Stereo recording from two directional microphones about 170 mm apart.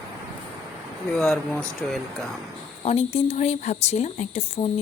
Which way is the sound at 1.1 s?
5° left (ahead or behind).